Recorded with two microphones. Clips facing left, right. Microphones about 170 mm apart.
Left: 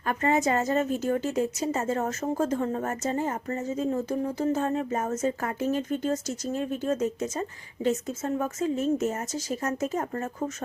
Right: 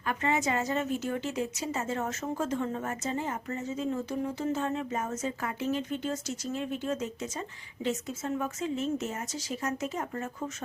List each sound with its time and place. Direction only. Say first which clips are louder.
0.0 s a woman's voice: left 5 dB; 45° left (ahead or behind)